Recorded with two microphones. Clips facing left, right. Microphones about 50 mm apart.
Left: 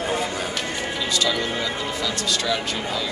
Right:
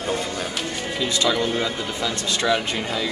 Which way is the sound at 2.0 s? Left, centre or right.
Right.